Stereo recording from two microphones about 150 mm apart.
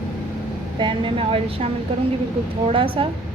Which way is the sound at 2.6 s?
35° right (ahead or behind).